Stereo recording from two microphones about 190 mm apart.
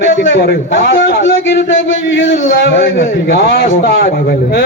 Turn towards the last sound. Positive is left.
turn(degrees=55)  # may be behind; listen again after turning